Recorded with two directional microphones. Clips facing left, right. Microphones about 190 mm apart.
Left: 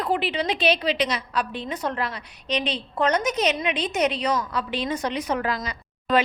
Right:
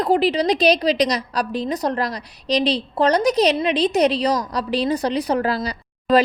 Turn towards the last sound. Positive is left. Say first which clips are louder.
# right 6 dB
turn(degrees=-35)  # may be behind; listen again after turning